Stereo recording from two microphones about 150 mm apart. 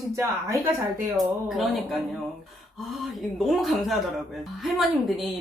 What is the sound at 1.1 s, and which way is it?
Speech, centre (ahead or behind).